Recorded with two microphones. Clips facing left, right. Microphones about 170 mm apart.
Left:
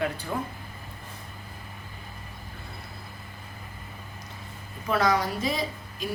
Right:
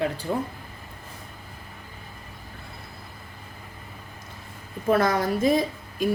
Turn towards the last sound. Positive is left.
turn(degrees=-50)  # may be behind; listen again after turning